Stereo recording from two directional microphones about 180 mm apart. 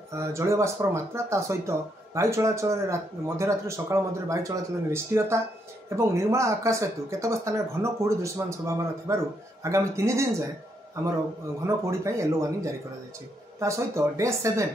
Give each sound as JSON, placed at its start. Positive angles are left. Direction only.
{"t": 0.1, "sound": "speech", "side_deg": -15}
{"t": 11.6, "sound": "speech", "side_deg": -15}